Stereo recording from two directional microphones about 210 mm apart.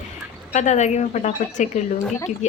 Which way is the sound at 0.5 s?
35° left (ahead or behind).